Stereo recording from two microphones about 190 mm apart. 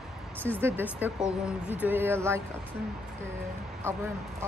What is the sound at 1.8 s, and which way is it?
Speech, 10° right (ahead or behind).